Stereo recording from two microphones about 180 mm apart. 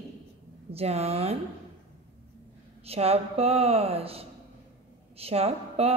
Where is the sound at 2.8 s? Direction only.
35° right (ahead or behind).